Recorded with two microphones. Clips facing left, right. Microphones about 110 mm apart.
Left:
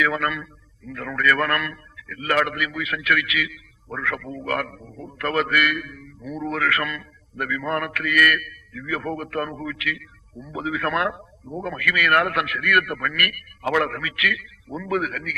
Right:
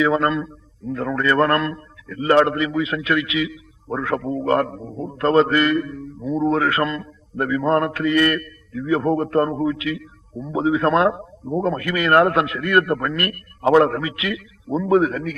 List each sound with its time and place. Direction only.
0.0 s a man's voice: 30° right (ahead or behind)